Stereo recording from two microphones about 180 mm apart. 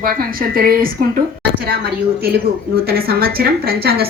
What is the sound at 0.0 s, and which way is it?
A woman's voice, 55° right (ahead or behind).